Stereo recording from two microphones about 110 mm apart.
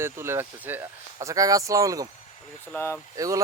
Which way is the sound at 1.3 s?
30° right (ahead or behind).